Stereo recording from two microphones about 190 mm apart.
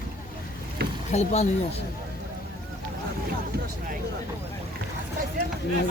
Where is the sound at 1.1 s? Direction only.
35° left (ahead or behind).